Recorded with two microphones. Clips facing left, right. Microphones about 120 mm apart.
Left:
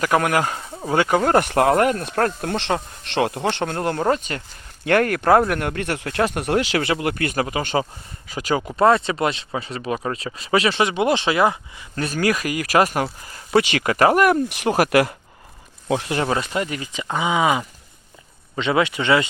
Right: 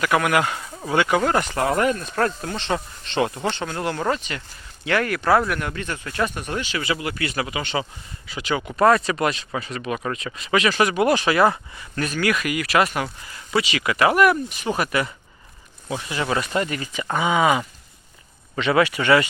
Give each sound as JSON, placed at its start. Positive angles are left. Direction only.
{"t": 0.0, "sound": "speech", "side_deg": 40}
{"t": 1.4, "sound": "speech", "side_deg": 65}
{"t": 12.0, "sound": "speech", "side_deg": 35}
{"t": 13.6, "sound": "speech", "side_deg": 55}
{"t": 14.3, "sound": "speech", "side_deg": 75}
{"t": 16.6, "sound": "speech", "side_deg": 15}